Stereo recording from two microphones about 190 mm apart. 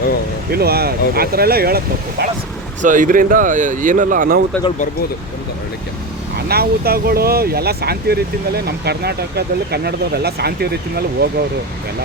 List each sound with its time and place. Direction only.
0.5 s speech: 55° right (ahead or behind)
2.8 s speech: 45° right (ahead or behind)
6.3 s speech: 55° right (ahead or behind)